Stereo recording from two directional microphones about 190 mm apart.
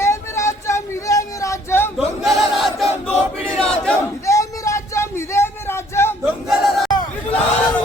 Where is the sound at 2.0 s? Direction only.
Centre (ahead or behind).